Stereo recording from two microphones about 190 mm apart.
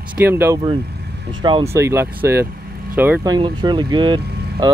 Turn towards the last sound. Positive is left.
turn(degrees=-25)  # may be behind; listen again after turning